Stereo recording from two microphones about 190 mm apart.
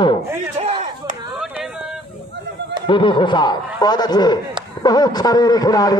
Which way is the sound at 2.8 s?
25° left (ahead or behind).